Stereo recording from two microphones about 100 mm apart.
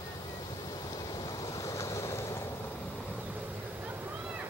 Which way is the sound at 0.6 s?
40° left (ahead or behind).